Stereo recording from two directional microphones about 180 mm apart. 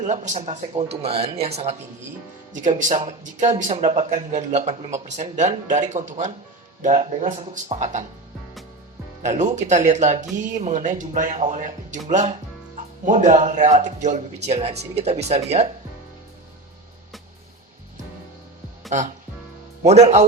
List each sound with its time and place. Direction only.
0.0 s speech: 40° right (ahead or behind)
9.2 s speech: 40° right (ahead or behind)
19.8 s speech: 40° right (ahead or behind)